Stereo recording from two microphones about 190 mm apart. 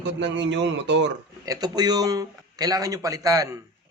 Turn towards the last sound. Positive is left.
turn(degrees=-20)  # may be behind; listen again after turning